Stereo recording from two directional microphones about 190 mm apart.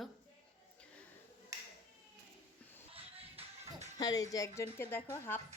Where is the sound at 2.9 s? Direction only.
35° right (ahead or behind).